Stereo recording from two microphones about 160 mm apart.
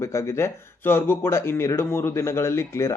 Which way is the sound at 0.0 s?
15° left (ahead or behind).